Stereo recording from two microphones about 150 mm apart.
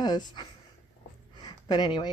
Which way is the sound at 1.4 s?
30° left (ahead or behind).